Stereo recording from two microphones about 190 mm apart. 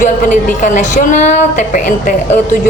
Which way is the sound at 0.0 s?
40° left (ahead or behind).